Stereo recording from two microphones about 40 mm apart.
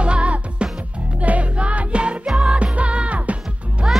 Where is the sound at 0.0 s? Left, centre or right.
Right.